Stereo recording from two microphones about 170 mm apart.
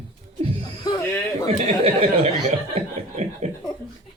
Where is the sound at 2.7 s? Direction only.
40° right (ahead or behind).